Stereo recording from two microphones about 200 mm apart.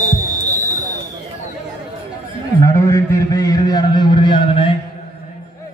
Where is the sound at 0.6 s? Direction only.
35° left (ahead or behind).